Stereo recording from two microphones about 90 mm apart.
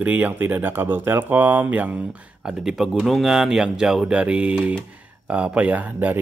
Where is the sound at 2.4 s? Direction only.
5° right (ahead or behind).